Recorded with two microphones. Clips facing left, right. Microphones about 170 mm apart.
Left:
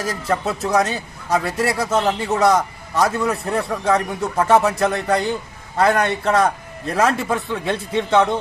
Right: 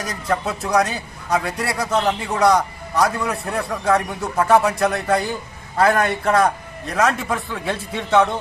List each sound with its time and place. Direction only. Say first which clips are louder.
0.3 s a man's voice: even; centre (ahead or behind)
6.8 s a man's voice: left 1 dB; 30° left (ahead or behind)
7.2 s a man's voice: left 3 dB; centre (ahead or behind)